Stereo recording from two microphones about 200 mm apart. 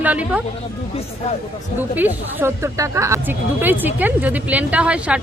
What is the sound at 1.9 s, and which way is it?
Speech, 10° right (ahead or behind).